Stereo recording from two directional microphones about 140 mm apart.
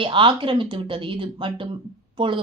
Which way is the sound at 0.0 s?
35° right (ahead or behind).